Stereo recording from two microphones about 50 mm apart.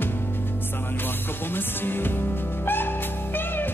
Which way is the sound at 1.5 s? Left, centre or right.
Left.